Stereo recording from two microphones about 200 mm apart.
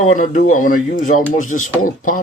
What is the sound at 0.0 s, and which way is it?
Speech, 40° left (ahead or behind).